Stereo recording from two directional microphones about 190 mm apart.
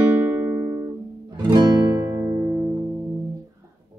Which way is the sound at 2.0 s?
15° right (ahead or behind).